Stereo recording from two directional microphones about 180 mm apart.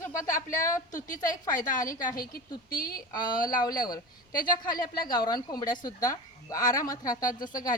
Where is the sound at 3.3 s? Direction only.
50° left (ahead or behind).